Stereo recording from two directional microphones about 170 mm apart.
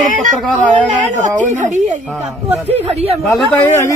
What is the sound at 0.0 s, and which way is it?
Speech, 50° right (ahead or behind).